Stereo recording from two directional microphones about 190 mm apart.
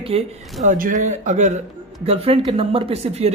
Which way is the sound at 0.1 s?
30° right (ahead or behind).